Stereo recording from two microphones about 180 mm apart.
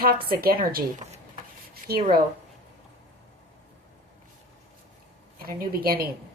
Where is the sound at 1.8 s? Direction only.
50° right (ahead or behind).